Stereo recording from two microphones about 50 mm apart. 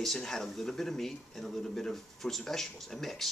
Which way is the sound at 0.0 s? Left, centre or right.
Centre.